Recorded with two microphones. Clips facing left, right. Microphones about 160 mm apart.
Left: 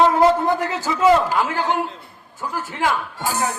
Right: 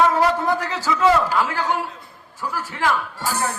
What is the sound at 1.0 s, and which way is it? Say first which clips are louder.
Speech: left 2 dB; 15° left (ahead or behind).